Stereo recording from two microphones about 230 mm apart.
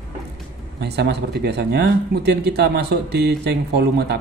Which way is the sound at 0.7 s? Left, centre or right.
Right.